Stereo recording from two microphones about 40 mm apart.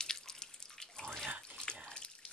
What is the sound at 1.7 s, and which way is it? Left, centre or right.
Water, left.